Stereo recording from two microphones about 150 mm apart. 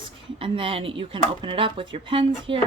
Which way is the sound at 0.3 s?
35° right (ahead or behind).